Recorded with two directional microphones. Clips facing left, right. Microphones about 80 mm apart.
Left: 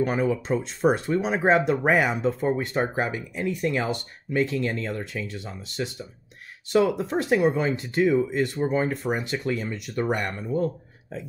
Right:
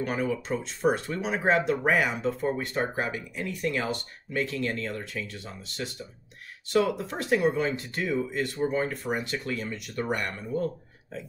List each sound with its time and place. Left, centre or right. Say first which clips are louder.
0.0 s speech: left 5 dB; left
6.7 s speech: left 3 dB; centre
7.1 s speech: left 4 dB; left